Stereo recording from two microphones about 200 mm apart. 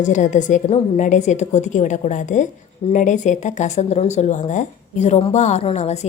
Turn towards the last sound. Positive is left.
turn(degrees=35)  # may be behind; listen again after turning